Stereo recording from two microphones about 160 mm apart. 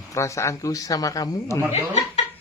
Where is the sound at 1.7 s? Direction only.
45° left (ahead or behind).